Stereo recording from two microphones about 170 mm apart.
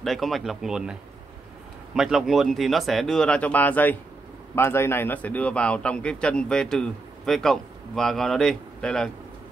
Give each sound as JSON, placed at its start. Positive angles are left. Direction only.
{"t": 0.0, "sound": "a man's voice", "side_deg": 0}
{"t": 2.0, "sound": "a man's voice", "side_deg": -5}